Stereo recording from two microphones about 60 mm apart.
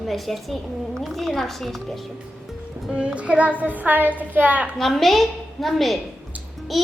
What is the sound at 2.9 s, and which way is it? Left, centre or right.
Child singing, centre.